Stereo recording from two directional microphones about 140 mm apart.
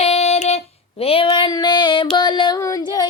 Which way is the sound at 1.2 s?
30° left (ahead or behind).